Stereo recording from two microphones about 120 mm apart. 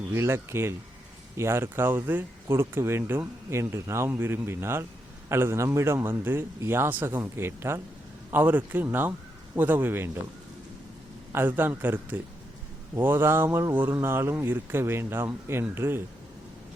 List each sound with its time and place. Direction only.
0.1 s a man's voice: 20° right (ahead or behind)
11.3 s a man's voice: 15° right (ahead or behind)